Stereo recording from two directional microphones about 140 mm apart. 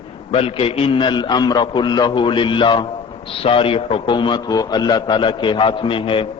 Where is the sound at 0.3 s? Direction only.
40° left (ahead or behind).